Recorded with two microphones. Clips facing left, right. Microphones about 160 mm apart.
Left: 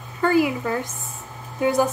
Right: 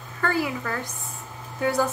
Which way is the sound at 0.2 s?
15° left (ahead or behind).